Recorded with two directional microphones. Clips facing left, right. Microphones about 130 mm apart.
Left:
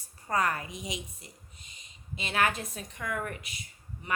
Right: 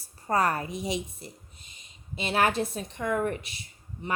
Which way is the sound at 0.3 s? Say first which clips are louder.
Right 4 dB; 35° right (ahead or behind).